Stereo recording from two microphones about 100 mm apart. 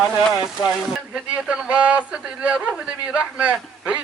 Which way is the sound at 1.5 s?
10° right (ahead or behind).